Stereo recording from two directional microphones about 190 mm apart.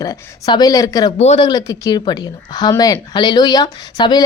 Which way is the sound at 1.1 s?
35° left (ahead or behind).